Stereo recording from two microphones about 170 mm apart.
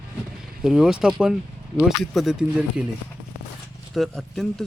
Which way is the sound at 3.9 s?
Centre (ahead or behind).